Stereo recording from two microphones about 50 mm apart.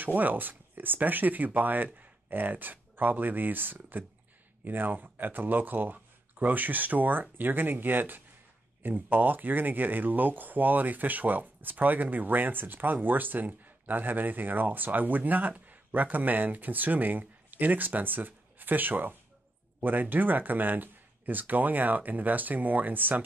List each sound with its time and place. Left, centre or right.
0.0 s speech: right